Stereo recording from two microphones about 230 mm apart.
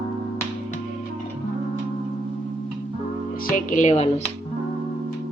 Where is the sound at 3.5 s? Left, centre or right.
Left.